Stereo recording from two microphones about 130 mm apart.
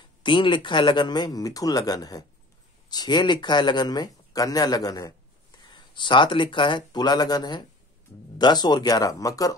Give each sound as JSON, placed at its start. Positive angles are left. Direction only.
{"t": 0.2, "sound": "speech", "side_deg": 40}